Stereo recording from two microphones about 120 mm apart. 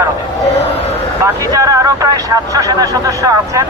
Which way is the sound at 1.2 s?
25° right (ahead or behind).